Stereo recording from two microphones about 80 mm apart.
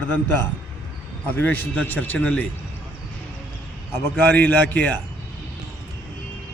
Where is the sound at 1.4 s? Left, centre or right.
Left.